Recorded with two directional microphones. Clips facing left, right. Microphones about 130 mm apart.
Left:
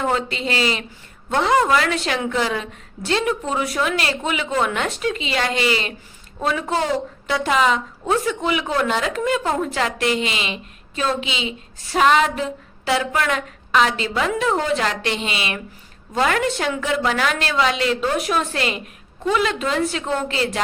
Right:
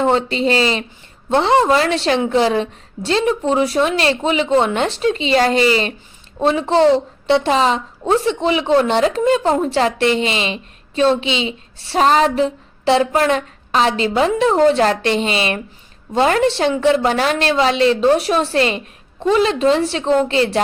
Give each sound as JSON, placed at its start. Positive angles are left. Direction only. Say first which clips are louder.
{"t": 0.0, "sound": "a woman's voice", "louder": "right 6 dB", "side_deg": -30}